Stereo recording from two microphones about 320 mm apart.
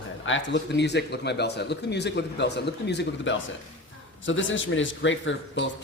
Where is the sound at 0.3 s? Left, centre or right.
Left.